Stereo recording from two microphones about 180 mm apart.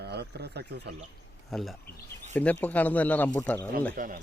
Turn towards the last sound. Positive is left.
turn(degrees=-50)  # may be behind; listen again after turning